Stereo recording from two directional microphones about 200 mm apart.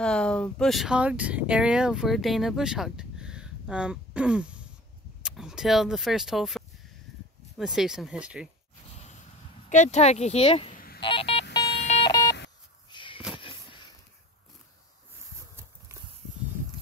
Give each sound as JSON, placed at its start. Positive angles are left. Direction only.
{"t": 0.0, "sound": "speech", "side_deg": 5}
{"t": 9.7, "sound": "speech", "side_deg": 35}
{"t": 11.0, "sound": "telephone dialing", "side_deg": 25}
{"t": 12.9, "sound": "a sound", "side_deg": 25}